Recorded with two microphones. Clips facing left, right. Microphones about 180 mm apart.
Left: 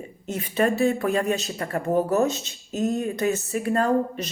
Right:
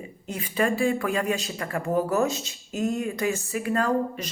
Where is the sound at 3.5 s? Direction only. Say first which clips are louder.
Left 2 dB; 40° left (ahead or behind).